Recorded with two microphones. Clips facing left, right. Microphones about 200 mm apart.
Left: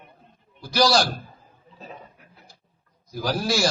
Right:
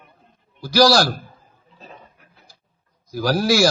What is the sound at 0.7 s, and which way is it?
Speech, 85° right.